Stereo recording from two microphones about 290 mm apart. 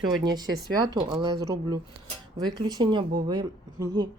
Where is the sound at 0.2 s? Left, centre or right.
Centre.